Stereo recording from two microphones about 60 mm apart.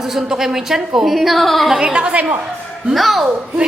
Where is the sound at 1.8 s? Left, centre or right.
Centre.